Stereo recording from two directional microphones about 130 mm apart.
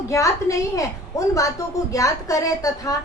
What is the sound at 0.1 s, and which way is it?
A woman's voice, 25° left (ahead or behind).